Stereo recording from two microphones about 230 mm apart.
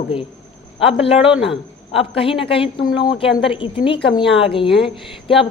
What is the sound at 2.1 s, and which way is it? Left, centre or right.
A woman's voice, left.